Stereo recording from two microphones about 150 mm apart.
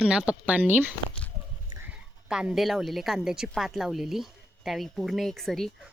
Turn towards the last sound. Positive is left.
turn(degrees=0)  # may be behind; listen again after turning